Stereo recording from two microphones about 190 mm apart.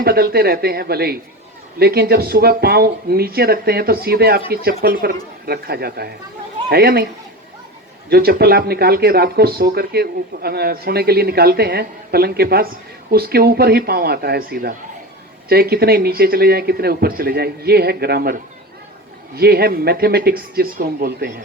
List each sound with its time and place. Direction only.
0.0 s speech: 55° right (ahead or behind)
8.1 s speech: 55° right (ahead or behind)
19.4 s speech: 55° right (ahead or behind)